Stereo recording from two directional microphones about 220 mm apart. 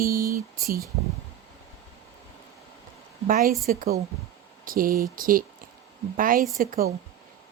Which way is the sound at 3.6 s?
40° right (ahead or behind).